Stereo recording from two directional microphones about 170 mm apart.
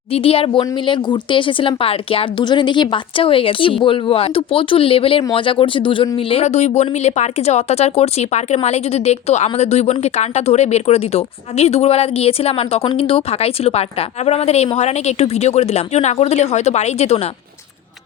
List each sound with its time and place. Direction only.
0.1 s speech: 35° left (ahead or behind)